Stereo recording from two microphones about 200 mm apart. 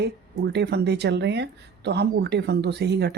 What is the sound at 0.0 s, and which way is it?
Speech, 55° right (ahead or behind).